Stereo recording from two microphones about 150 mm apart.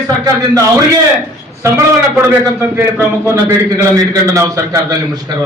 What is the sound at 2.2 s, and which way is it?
A man's voice, 20° right (ahead or behind).